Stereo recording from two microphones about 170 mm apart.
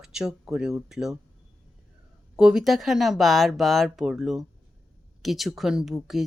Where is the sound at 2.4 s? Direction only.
5° right (ahead or behind).